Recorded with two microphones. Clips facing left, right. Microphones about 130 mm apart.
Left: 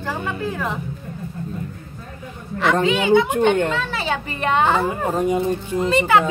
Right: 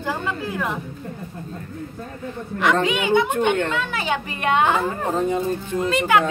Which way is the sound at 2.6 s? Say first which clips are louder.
Left 2 dB; 10° right (ahead or behind).